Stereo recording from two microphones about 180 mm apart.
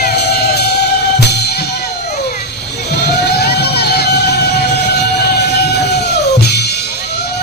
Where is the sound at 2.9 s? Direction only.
65° left (ahead or behind).